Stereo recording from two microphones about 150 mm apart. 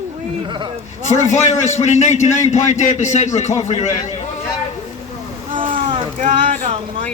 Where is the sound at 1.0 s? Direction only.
50° left (ahead or behind).